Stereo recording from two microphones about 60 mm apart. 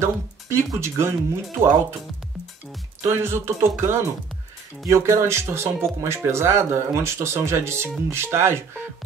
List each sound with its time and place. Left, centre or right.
0.0 s speech: right
3.0 s speech: right